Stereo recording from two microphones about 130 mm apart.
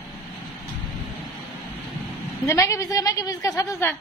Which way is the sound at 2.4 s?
20° left (ahead or behind).